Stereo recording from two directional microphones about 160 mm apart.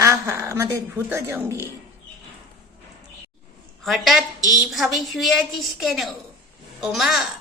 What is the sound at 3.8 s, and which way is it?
Speech, centre (ahead or behind).